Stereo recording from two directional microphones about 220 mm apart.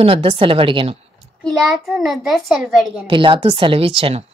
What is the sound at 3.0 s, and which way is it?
Speech, 25° right (ahead or behind).